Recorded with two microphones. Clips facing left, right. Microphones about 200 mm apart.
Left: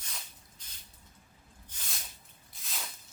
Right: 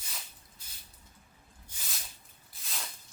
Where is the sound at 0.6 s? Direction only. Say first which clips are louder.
Even; 10° right (ahead or behind).